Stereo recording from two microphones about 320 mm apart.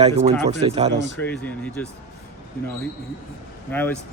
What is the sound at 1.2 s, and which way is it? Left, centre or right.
Speech, centre.